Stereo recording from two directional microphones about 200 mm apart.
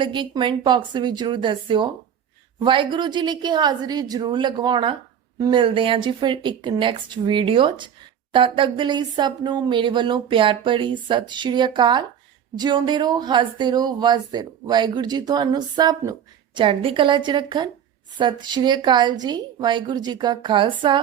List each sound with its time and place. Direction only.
0.0 s speech: 25° right (ahead or behind)